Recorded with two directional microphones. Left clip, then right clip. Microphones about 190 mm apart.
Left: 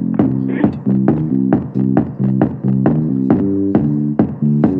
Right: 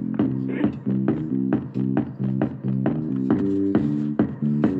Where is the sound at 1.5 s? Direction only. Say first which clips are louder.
Left 10 dB; 20° left (ahead or behind).